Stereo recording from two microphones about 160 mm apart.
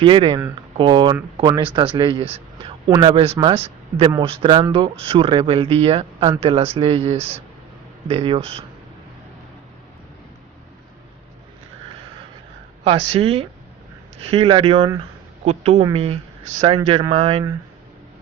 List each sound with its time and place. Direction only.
0.0 s speech: 30° right (ahead or behind)
12.8 s speech: 35° right (ahead or behind)